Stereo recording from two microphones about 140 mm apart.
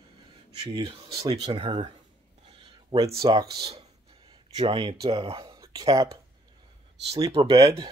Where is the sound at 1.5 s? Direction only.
40° right (ahead or behind).